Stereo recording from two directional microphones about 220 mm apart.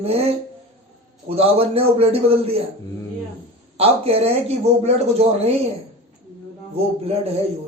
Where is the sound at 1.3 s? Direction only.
25° right (ahead or behind).